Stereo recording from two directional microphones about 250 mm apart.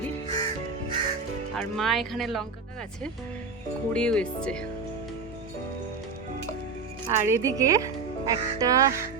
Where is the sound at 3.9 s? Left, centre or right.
Centre.